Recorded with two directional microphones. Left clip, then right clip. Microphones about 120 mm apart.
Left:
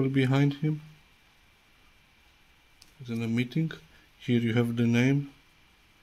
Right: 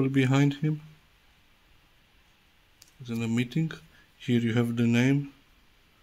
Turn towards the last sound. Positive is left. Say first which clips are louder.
# right 1 dB
turn(degrees=-5)  # may be behind; listen again after turning